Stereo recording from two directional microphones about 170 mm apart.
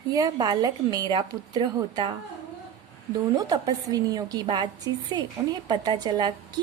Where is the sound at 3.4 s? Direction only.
25° right (ahead or behind).